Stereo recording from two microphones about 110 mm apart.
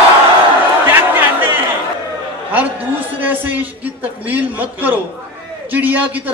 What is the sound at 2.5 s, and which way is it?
A man's voice, 15° right (ahead or behind).